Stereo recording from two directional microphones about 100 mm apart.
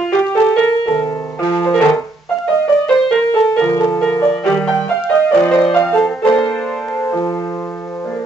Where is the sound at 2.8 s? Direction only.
10° left (ahead or behind).